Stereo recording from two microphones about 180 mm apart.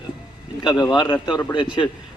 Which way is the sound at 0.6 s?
25° left (ahead or behind).